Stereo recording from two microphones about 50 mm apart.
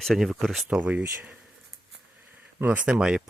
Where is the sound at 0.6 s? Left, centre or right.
Right.